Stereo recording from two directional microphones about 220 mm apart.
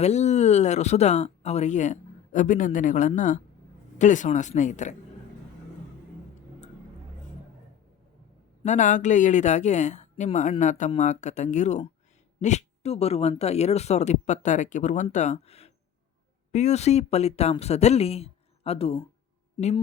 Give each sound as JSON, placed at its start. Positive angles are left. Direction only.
{"t": 0.0, "sound": "speech", "side_deg": 30}
{"t": 8.6, "sound": "speech", "side_deg": 35}